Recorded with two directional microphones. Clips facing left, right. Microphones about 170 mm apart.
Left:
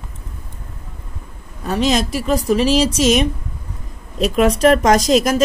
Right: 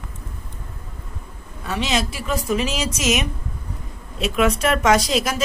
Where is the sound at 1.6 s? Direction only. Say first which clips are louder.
Left 6 dB; 40° left (ahead or behind).